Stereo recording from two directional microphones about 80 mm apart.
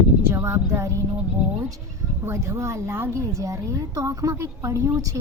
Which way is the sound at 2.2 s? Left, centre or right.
Right.